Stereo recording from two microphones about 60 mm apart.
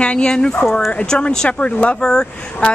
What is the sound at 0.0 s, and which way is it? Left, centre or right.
Speech, centre.